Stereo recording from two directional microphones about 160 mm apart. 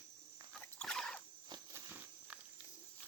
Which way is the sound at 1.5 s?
15° right (ahead or behind).